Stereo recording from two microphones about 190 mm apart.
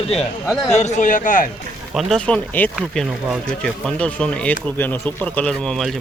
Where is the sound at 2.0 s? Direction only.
5° left (ahead or behind).